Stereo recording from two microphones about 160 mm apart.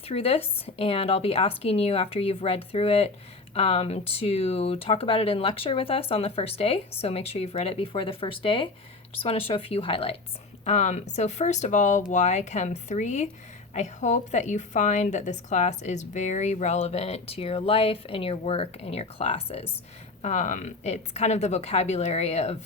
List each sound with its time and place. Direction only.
0.1 s speech: 35° left (ahead or behind)
10.7 s a woman's voice: 50° left (ahead or behind)
20.2 s a woman's voice: 50° left (ahead or behind)